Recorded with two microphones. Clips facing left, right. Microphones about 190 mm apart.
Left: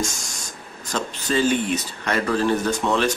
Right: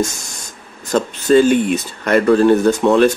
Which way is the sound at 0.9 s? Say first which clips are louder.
Right 11 dB; 55° right (ahead or behind).